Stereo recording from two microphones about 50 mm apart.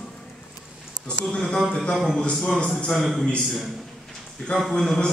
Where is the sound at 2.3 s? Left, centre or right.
Centre.